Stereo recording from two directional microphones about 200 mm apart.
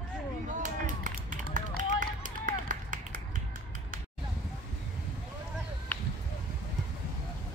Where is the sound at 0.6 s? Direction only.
40° right (ahead or behind).